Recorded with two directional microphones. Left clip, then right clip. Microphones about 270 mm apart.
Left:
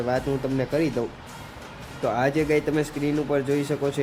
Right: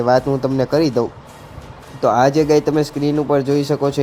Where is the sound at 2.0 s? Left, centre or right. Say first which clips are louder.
Right 9 dB; centre.